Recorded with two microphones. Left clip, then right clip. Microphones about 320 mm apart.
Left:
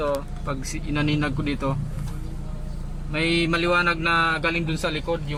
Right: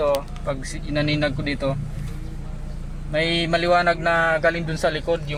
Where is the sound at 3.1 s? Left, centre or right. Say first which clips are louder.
Right 2 dB; right.